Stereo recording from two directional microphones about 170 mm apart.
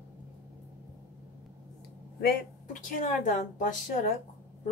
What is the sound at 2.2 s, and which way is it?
Speech, 50° left (ahead or behind).